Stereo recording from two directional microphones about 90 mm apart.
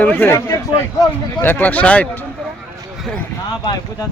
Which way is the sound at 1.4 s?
20° left (ahead or behind).